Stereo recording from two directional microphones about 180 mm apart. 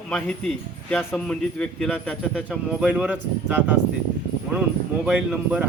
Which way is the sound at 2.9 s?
5° right (ahead or behind).